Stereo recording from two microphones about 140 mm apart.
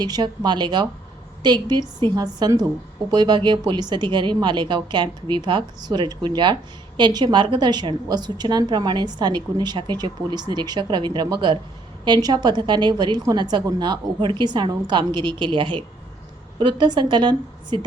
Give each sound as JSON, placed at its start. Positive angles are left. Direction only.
{"t": 0.0, "sound": "a woman's voice", "side_deg": -30}